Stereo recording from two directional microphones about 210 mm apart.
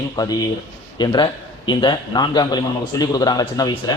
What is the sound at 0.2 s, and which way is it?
A man's voice, 15° left (ahead or behind).